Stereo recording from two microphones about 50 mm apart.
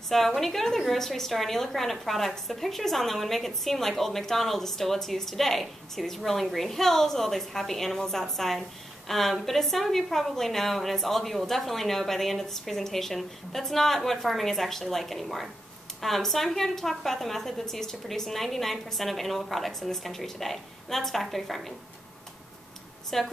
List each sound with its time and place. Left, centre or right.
0.4 s a woman's voice: centre
23.0 s speech: centre